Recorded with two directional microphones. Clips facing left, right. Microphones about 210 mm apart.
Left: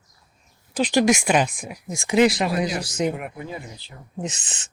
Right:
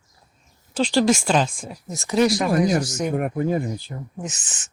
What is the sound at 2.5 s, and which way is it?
Speech, 50° right (ahead or behind).